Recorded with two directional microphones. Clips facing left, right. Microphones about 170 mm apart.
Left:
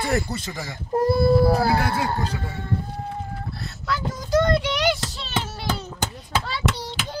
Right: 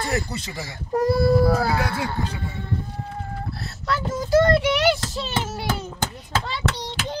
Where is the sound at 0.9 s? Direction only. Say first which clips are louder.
Even; 25° left (ahead or behind).